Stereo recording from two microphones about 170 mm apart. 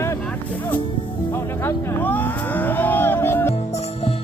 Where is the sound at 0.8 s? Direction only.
30° left (ahead or behind).